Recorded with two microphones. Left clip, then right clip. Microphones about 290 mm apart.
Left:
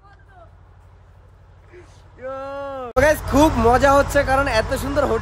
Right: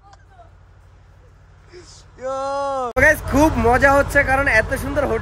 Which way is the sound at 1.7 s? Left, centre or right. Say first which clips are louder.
Right 3 dB; centre.